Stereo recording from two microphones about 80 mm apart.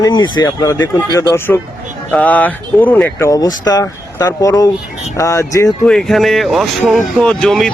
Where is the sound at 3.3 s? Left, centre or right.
Left.